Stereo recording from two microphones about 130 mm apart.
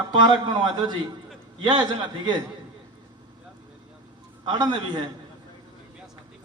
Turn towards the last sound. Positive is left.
turn(degrees=-35)  # may be behind; listen again after turning